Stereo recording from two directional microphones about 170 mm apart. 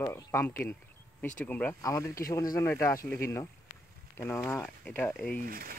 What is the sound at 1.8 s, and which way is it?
Speech, 20° left (ahead or behind).